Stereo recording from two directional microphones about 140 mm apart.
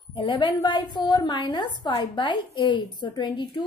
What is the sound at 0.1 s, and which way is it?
A woman's voice, 35° left (ahead or behind).